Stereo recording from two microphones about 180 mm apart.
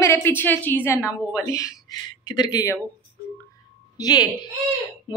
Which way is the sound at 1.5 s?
20° left (ahead or behind).